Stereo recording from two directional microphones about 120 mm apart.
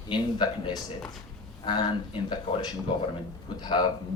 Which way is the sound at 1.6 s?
40° left (ahead or behind).